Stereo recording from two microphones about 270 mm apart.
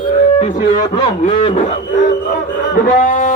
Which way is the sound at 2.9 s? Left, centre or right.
Left.